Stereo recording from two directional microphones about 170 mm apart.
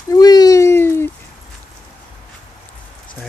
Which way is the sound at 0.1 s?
20° left (ahead or behind).